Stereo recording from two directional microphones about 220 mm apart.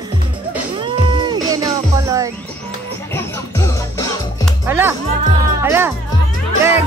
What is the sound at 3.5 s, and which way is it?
Music, 15° left (ahead or behind).